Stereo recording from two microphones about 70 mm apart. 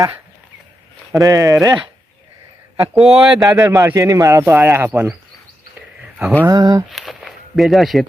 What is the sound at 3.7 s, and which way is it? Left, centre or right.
Speech, right.